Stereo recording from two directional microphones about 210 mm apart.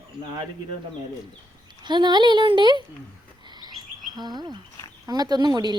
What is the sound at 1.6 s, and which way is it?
Speech, 20° right (ahead or behind).